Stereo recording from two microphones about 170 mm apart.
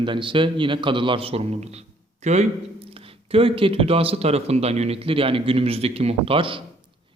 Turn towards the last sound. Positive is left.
turn(degrees=-30)  # may be behind; listen again after turning